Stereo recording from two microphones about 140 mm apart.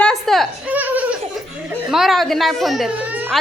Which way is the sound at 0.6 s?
10° right (ahead or behind).